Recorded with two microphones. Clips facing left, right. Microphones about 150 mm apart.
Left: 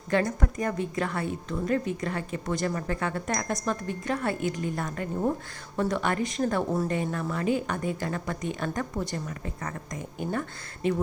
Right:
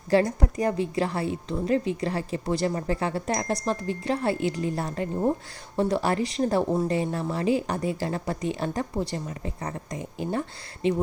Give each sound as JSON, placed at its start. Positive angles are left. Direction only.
{"t": 0.1, "sound": "speech", "side_deg": -30}